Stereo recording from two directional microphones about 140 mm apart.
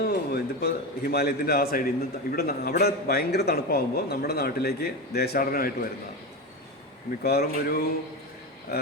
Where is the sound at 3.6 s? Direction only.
90° left.